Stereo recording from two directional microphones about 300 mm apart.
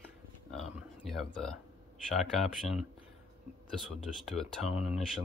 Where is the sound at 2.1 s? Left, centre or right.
Centre.